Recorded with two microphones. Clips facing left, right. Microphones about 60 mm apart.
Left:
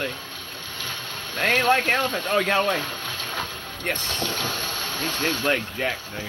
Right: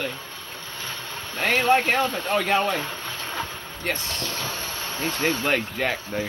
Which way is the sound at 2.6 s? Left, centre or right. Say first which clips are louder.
Left 1 dB; right.